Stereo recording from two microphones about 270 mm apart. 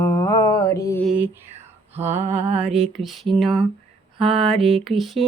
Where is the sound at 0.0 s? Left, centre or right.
Centre.